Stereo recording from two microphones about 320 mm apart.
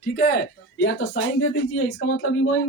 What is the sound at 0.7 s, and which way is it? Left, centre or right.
Speech, left.